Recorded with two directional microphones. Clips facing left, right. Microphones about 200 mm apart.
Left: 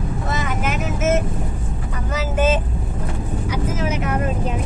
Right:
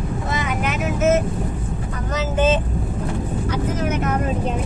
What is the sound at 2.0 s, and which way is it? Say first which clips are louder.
Speech: right 1 dB; 10° left (ahead or behind).